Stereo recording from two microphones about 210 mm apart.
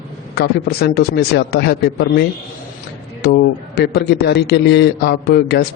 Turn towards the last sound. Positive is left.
turn(degrees=50)  # may be behind; listen again after turning